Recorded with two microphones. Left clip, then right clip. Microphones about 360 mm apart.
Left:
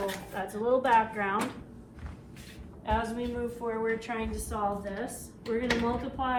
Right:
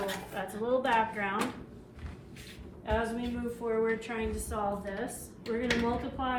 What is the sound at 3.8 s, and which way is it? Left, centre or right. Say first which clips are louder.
A woman's voice: left 1 dB; left.